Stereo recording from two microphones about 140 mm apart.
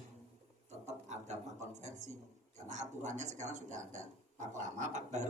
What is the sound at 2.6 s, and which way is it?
A man's voice, 60° right (ahead or behind).